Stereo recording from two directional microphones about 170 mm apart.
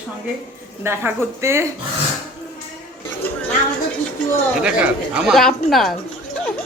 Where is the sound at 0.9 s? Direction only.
15° right (ahead or behind).